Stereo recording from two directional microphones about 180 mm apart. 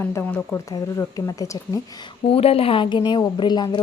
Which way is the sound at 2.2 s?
35° left (ahead or behind).